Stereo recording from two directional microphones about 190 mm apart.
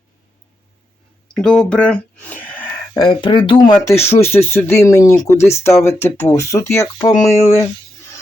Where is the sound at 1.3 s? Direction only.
5° left (ahead or behind).